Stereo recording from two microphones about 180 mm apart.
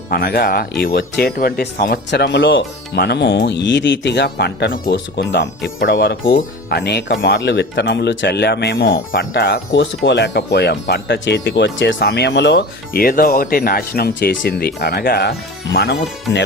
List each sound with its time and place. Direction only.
0.1 s speech: 60° left (ahead or behind)
9.3 s speech: 70° left (ahead or behind)